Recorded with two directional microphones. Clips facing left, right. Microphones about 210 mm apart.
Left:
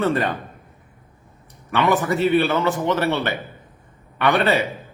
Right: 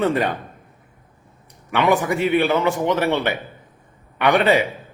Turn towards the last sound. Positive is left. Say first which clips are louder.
# right 2 dB
turn(degrees=-15)  # may be behind; listen again after turning